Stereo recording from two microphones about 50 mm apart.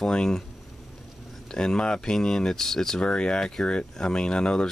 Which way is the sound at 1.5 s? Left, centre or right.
Centre.